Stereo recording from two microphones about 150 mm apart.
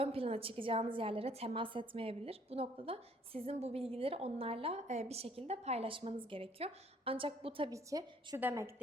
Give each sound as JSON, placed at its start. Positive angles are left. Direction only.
{"t": 0.0, "sound": "a woman's voice", "side_deg": -40}
{"t": 7.7, "sound": "a woman's voice", "side_deg": -20}